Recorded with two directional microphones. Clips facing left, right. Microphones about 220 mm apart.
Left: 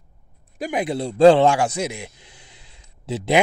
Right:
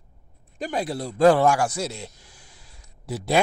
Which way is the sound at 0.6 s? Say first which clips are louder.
Left 4 dB; 15° left (ahead or behind).